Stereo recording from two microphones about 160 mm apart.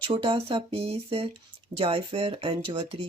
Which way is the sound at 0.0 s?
30° right (ahead or behind).